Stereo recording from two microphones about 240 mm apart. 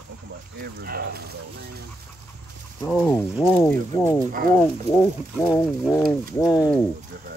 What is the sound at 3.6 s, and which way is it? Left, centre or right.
Speech, centre.